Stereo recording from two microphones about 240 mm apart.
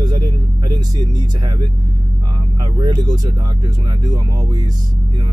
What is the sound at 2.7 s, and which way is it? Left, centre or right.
Speech, centre.